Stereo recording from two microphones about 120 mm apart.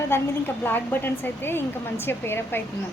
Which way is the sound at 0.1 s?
20° left (ahead or behind).